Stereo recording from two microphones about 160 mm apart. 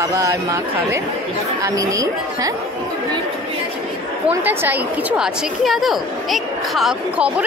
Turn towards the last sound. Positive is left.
turn(degrees=-5)  # may be behind; listen again after turning